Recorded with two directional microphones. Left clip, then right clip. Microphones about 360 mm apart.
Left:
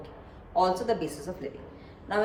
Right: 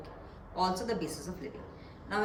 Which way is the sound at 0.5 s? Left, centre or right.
Centre.